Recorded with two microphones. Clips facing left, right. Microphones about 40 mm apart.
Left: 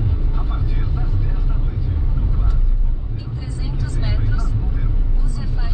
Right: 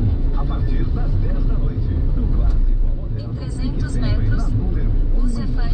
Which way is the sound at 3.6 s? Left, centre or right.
Centre.